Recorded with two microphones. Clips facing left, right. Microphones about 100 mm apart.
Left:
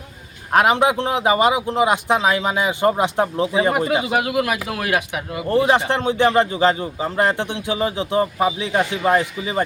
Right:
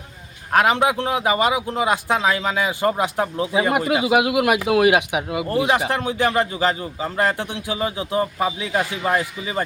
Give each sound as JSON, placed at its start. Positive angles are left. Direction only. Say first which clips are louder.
{"t": 0.5, "sound": "a man's voice", "louder": "left 2 dB", "side_deg": 20}
{"t": 3.5, "sound": "speech", "louder": "right 2 dB", "side_deg": -10}
{"t": 5.9, "sound": "a man's voice", "louder": "left 4 dB", "side_deg": 25}